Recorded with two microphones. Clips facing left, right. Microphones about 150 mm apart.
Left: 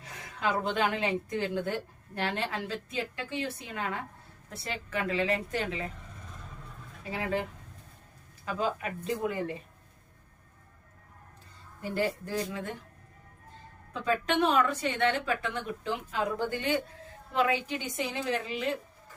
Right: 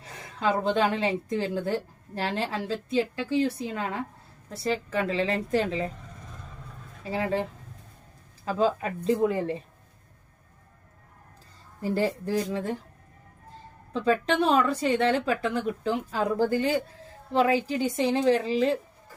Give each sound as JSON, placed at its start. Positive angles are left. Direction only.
{"t": 0.0, "sound": "a woman's voice", "side_deg": -30}
{"t": 7.0, "sound": "speech", "side_deg": -30}
{"t": 8.4, "sound": "a woman's voice", "side_deg": -30}
{"t": 11.8, "sound": "a woman's voice", "side_deg": -35}
{"t": 13.9, "sound": "a woman's voice", "side_deg": -30}